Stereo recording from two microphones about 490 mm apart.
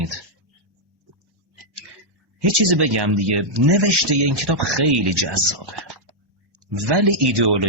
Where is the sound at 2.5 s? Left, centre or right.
Right.